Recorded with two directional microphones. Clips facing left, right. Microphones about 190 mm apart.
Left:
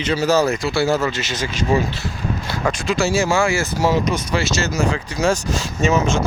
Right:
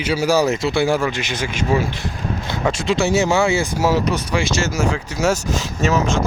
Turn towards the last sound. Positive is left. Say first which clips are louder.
# left 1 dB
turn(degrees=0)  # may be behind; listen again after turning